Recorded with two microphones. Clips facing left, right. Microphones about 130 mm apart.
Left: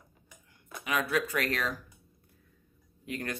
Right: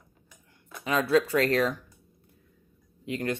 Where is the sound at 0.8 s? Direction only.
30° right (ahead or behind).